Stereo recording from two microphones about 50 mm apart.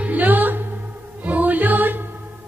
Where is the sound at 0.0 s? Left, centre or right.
Right.